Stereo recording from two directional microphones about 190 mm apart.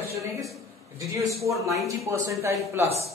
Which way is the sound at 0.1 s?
15° right (ahead or behind).